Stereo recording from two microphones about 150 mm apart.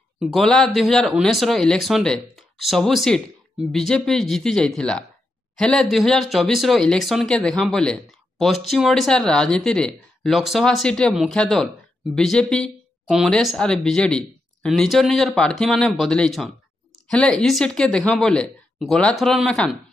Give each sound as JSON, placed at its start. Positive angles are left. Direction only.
{"t": 0.2, "sound": "speech", "side_deg": 0}